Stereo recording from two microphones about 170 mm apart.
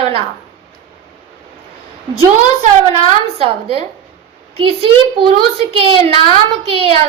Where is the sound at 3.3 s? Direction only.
35° right (ahead or behind).